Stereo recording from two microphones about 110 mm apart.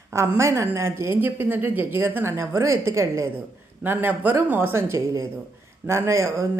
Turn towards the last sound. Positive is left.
turn(degrees=-25)  # may be behind; listen again after turning